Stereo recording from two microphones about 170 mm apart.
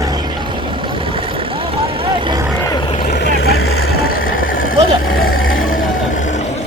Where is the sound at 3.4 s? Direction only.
65° left (ahead or behind); by 6.4 s 45° left (ahead or behind).